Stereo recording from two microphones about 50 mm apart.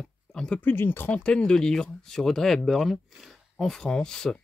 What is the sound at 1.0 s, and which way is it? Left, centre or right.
Speech, left.